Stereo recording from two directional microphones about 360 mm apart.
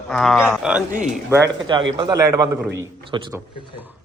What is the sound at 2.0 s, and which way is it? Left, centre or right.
A man's voice, centre.